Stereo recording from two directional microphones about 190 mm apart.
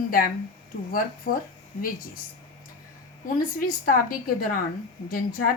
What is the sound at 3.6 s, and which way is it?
Speech, 45° left (ahead or behind).